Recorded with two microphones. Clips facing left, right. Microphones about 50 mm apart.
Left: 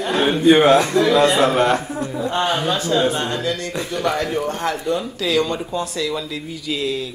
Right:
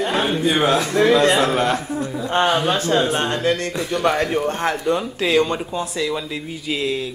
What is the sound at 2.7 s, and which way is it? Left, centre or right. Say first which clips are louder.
Speech: even; right.